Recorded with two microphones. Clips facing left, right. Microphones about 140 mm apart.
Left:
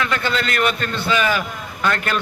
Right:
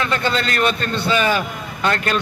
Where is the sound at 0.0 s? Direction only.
30° right (ahead or behind).